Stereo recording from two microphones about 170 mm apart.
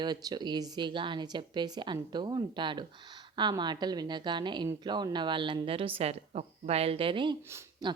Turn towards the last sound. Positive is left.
turn(degrees=-25)  # may be behind; listen again after turning